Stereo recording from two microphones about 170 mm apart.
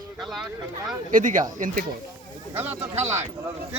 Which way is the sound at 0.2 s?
Centre (ahead or behind).